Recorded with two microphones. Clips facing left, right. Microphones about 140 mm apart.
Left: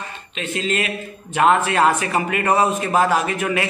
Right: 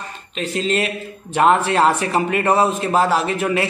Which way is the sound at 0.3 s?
35° right (ahead or behind).